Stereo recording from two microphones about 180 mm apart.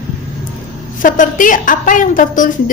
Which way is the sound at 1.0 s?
45° left (ahead or behind).